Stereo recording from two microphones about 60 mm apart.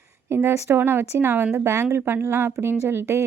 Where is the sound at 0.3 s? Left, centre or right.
Right.